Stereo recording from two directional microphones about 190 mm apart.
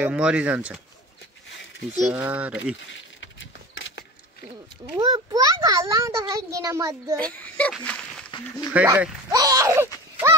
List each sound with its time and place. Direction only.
0.0 s a child's voice: 5° right (ahead or behind)
2.1 s a child's voice: 10° right (ahead or behind)
3.2 s vehicle: 75° left (ahead or behind)
4.9 s a child's voice: 20° right (ahead or behind)
7.2 s speech: 5° left (ahead or behind)
8.7 s a child's voice: 10° right (ahead or behind)